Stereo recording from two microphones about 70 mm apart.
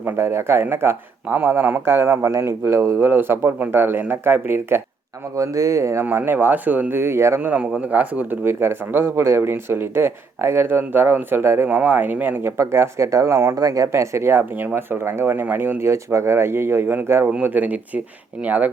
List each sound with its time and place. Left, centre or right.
0.2 s speech: right
5.4 s speech: right
6.1 s speech: right
7.0 s speech: right
7.4 s speech: right
15.9 s speech: right